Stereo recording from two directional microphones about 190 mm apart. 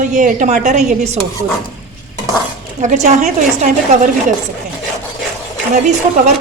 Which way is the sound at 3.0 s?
40° right (ahead or behind).